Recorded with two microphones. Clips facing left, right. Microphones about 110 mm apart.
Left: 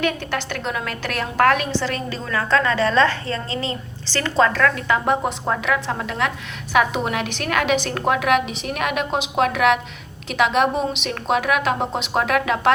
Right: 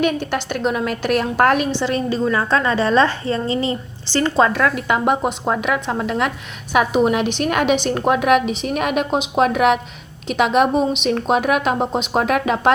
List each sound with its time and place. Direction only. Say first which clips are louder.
0.0 s a woman's voice: right 4 dB; 20° right (ahead or behind)